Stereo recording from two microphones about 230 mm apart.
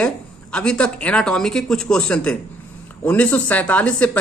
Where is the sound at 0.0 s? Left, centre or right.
Centre.